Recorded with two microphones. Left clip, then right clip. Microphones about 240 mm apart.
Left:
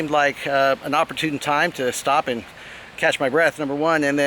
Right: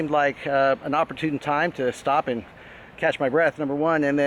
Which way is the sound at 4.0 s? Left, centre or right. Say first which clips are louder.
Left 2 dB; centre.